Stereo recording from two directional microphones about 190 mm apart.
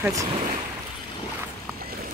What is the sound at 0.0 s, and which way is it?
Speech, 15° right (ahead or behind).